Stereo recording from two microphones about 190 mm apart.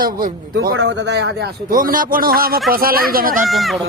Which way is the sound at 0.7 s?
70° right (ahead or behind).